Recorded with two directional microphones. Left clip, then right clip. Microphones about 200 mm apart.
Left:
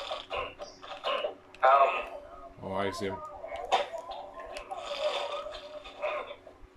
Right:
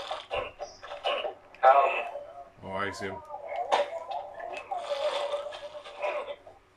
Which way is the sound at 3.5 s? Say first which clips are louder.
Right 2 dB; centre (ahead or behind).